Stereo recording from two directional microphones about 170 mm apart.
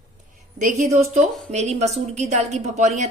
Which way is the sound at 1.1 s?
40° right (ahead or behind).